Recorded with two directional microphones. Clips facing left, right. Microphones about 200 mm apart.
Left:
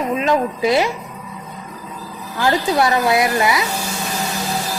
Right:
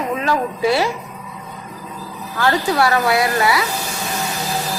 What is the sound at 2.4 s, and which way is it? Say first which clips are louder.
Speech: even; 20° left (ahead or behind).